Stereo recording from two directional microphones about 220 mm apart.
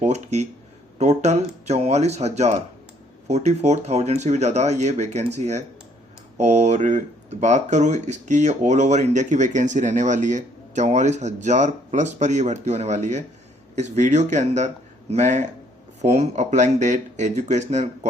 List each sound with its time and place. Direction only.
0.0 s speech: 30° right (ahead or behind)